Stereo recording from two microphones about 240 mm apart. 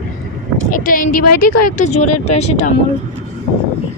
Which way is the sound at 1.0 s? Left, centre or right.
Left.